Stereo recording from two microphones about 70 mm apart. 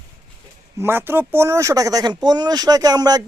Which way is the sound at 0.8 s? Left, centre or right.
Right.